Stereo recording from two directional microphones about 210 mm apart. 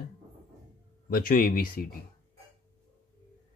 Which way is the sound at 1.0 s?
45° left (ahead or behind).